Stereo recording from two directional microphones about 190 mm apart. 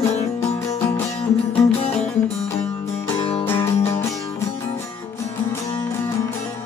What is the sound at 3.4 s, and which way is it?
Music, 10° left (ahead or behind).